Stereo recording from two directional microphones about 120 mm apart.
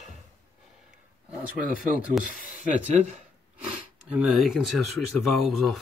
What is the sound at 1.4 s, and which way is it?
Speech, 10° right (ahead or behind).